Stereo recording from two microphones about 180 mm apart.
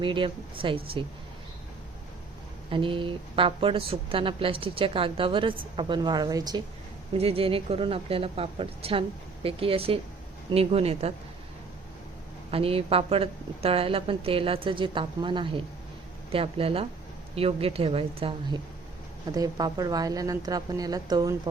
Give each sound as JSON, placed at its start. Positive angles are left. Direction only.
{"t": 0.0, "sound": "a woman's voice", "side_deg": -25}
{"t": 2.6, "sound": "a woman's voice", "side_deg": -30}
{"t": 7.1, "sound": "a woman's voice", "side_deg": -35}
{"t": 12.5, "sound": "a woman's voice", "side_deg": -30}